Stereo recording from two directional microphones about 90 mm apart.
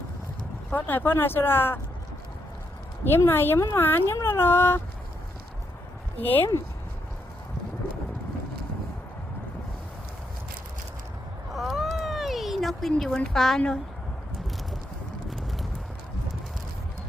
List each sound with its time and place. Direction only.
0.7 s speech: 20° left (ahead or behind)
3.0 s speech: 25° left (ahead or behind)
6.2 s speech: 25° left (ahead or behind)
11.5 s cat: centre (ahead or behind)
15.3 s a sound: centre (ahead or behind)